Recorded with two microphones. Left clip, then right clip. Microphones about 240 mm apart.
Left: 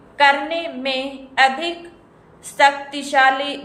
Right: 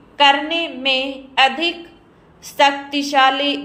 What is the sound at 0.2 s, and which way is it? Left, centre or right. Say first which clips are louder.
A man's voice: right 1 dB; centre.